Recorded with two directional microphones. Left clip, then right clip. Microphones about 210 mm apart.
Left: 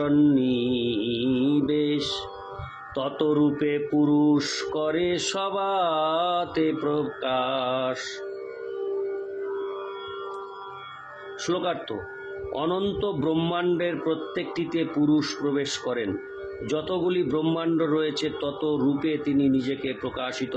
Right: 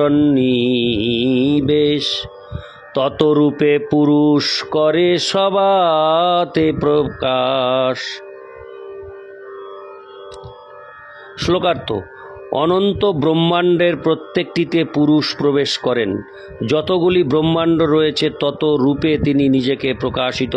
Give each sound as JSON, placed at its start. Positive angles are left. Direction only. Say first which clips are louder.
{"t": 0.0, "sound": "speech", "louder": "right 8 dB", "side_deg": -40}
{"t": 11.3, "sound": "speech", "louder": "right 11 dB", "side_deg": -50}